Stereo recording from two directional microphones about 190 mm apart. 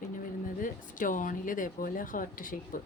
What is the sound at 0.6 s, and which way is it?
Speech, 45° left (ahead or behind).